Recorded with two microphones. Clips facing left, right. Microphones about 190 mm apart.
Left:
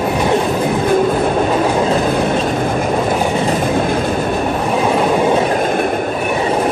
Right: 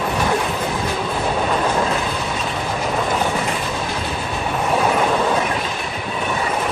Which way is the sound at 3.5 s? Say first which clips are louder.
Left 9 dB; 50° left (ahead or behind).